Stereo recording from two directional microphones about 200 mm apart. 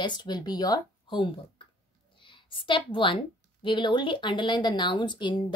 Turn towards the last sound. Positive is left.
turn(degrees=20)  # may be behind; listen again after turning